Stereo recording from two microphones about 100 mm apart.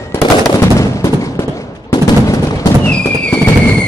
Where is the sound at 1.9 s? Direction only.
40° left (ahead or behind).